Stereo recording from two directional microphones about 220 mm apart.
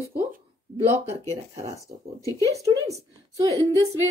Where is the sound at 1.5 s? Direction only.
15° right (ahead or behind).